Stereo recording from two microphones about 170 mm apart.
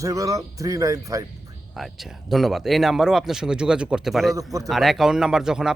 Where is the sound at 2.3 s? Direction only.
Centre (ahead or behind).